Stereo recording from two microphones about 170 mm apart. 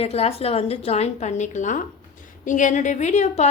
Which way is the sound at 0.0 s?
35° left (ahead or behind).